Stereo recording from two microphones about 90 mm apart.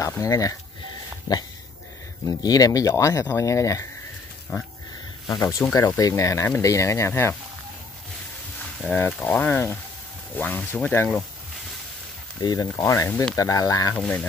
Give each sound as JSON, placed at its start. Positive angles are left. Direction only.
{"t": 0.2, "sound": "speech", "side_deg": 40}
{"t": 5.3, "sound": "speech", "side_deg": 40}
{"t": 8.9, "sound": "speech", "side_deg": 20}
{"t": 12.4, "sound": "speech", "side_deg": 45}
{"t": 13.9, "sound": "speech", "side_deg": 10}